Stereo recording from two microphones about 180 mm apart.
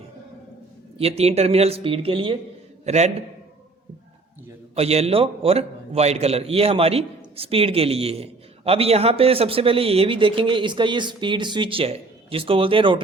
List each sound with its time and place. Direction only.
0.9 s a man's voice: 35° right (ahead or behind)
4.7 s a man's voice: 35° right (ahead or behind)